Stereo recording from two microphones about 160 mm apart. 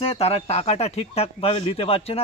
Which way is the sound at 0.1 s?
40° left (ahead or behind).